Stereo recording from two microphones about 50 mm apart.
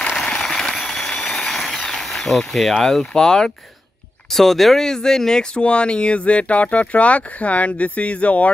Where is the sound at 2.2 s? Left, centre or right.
Centre.